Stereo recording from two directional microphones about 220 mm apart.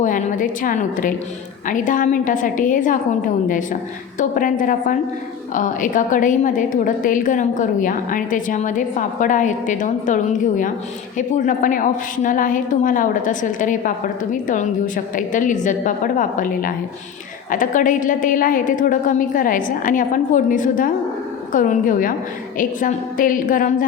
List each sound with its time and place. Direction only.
0.0 s a woman's voice: 35° left (ahead or behind)